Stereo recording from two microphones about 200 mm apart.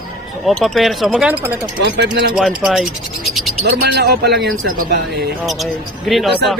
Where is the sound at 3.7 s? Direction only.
55° right (ahead or behind).